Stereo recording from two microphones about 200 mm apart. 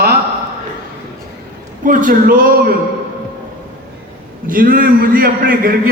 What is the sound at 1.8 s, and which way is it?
Speech, 40° right (ahead or behind).